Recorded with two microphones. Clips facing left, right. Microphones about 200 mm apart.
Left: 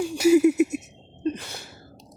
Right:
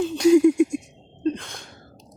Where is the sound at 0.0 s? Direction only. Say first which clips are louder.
Right 2 dB; 10° left (ahead or behind).